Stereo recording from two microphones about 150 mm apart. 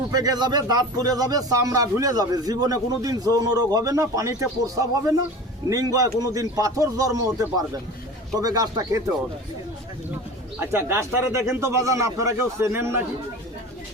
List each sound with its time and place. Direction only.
0.1 s speech: 25° right (ahead or behind)
10.6 s speech: 15° right (ahead or behind)